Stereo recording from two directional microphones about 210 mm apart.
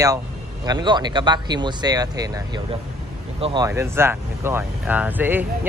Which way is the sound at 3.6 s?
10° right (ahead or behind).